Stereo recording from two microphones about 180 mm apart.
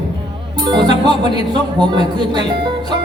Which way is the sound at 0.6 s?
25° right (ahead or behind).